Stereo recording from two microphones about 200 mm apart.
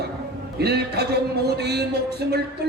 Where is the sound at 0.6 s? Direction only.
55° right (ahead or behind).